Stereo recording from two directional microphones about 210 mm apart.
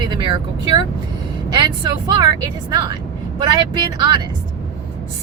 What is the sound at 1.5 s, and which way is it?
Speech, 20° right (ahead or behind).